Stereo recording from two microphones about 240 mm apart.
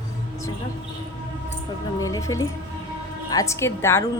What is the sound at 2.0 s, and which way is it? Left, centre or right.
Speech, centre.